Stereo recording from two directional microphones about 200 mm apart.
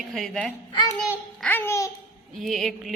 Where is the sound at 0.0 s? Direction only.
Centre (ahead or behind).